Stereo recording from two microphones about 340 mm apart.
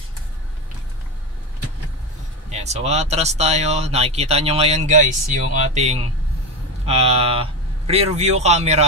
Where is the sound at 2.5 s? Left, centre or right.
Centre.